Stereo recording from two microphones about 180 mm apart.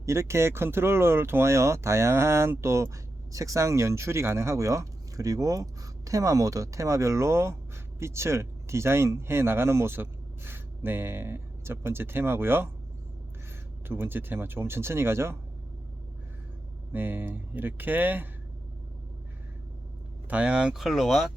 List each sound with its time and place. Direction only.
0.0 s speech: 15° right (ahead or behind)
13.8 s speech: 10° right (ahead or behind)
16.9 s speech: 10° right (ahead or behind)
20.3 s speech: 5° right (ahead or behind)